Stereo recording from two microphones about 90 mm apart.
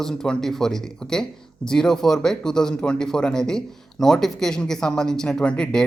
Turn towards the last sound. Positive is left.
turn(degrees=10)  # may be behind; listen again after turning